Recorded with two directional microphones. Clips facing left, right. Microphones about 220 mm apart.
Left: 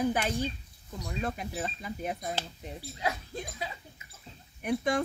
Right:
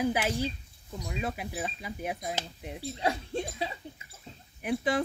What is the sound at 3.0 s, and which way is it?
Speech, 30° right (ahead or behind).